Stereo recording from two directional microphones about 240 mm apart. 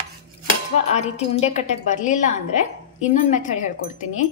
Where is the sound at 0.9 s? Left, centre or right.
Left.